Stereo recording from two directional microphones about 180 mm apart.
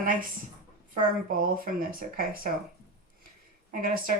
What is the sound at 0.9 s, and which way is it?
Speech, 50° right (ahead or behind).